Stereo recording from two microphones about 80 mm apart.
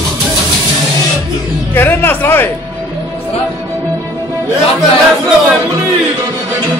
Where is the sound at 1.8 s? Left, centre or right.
Left.